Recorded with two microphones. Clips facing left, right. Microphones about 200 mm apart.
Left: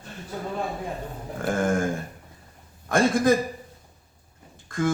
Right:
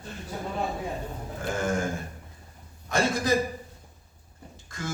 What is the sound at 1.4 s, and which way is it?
Speech, 55° left (ahead or behind).